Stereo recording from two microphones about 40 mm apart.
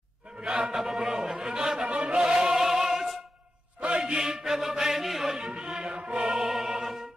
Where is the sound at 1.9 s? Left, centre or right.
Right.